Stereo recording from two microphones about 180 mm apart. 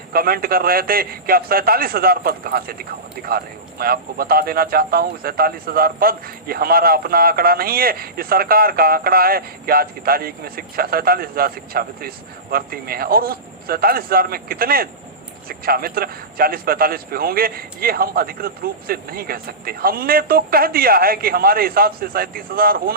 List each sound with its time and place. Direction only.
0.1 s speech: 55° right (ahead or behind)